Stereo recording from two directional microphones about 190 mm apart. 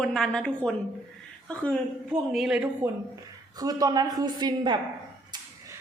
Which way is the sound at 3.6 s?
20° right (ahead or behind).